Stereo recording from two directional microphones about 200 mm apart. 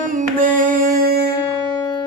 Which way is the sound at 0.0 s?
40° right (ahead or behind).